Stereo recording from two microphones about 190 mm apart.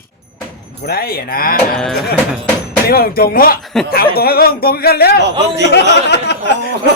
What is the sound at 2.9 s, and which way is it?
Speech, 55° left (ahead or behind).